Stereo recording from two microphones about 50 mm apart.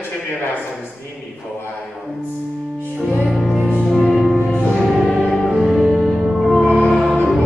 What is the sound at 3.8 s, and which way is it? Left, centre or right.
Music, centre.